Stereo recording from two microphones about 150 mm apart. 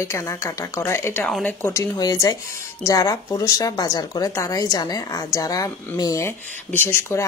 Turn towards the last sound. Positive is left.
turn(degrees=15)  # may be behind; listen again after turning